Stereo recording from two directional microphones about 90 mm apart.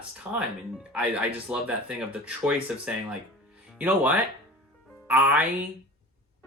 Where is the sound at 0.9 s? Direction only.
15° right (ahead or behind).